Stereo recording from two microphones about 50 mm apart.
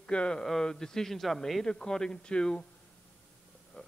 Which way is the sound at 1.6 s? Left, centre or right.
Centre.